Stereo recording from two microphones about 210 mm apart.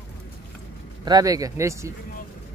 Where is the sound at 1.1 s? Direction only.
15° right (ahead or behind).